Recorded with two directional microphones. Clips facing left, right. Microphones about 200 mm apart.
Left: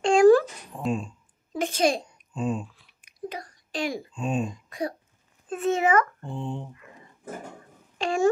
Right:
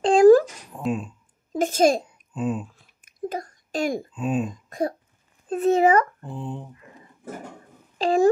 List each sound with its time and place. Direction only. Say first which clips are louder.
0.0 s a sound: right 3 dB; 35° right (ahead or behind)
0.7 s speech: right 1 dB; centre (ahead or behind)
1.5 s a child's voice: right 5 dB; 45° right (ahead or behind)
2.0 s a sound: right 2 dB; 5° right (ahead or behind)
2.7 s a sound: right 2 dB; 45° right (ahead or behind)
4.1 s speech: right 3 dB; 5° right (ahead or behind)
4.6 s cough: right 5 dB; 45° right (ahead or behind)
5.5 s a child's voice: right 5 dB; 35° right (ahead or behind)
6.2 s speech: even; 5° right (ahead or behind)
8.0 s a child's voice: right 5 dB; 35° right (ahead or behind)